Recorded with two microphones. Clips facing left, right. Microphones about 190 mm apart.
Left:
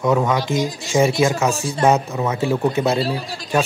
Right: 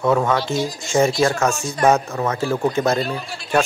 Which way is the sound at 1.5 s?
30° left (ahead or behind).